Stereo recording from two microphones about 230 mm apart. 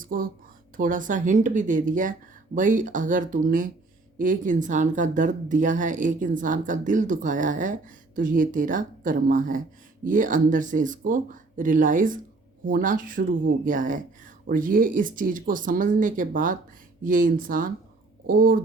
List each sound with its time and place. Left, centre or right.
0.0 s speech: right